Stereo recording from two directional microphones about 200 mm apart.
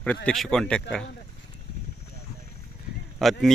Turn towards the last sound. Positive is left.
turn(degrees=0)  # may be behind; listen again after turning